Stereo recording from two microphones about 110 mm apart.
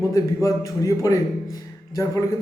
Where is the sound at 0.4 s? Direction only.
30° left (ahead or behind).